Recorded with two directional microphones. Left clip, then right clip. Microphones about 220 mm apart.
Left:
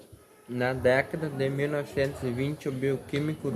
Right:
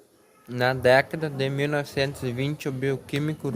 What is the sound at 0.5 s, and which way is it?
A woman's voice, 45° right (ahead or behind).